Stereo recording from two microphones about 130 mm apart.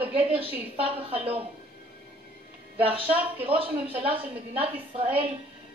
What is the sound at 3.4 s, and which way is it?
Speech, 45° right (ahead or behind).